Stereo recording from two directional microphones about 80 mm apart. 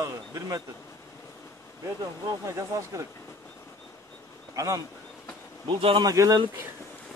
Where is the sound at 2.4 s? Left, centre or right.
Right.